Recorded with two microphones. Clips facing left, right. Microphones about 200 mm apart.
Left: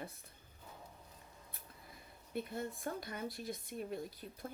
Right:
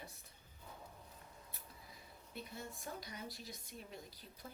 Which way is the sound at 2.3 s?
55° left (ahead or behind).